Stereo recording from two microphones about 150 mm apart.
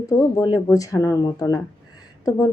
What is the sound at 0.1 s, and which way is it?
A woman's voice, 25° left (ahead or behind).